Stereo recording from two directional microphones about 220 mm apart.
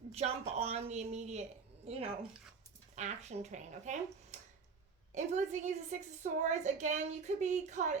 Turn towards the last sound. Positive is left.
turn(degrees=-30)  # may be behind; listen again after turning